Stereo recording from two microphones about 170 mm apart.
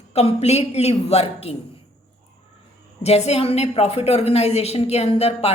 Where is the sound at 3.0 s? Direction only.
40° left (ahead or behind).